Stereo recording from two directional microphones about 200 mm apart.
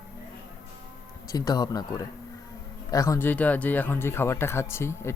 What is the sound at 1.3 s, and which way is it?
Speech, 20° left (ahead or behind).